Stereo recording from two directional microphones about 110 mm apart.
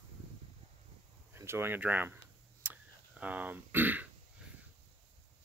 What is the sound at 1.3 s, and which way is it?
Speech, 20° right (ahead or behind).